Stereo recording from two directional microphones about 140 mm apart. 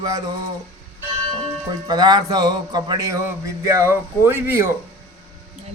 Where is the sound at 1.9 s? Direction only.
30° right (ahead or behind).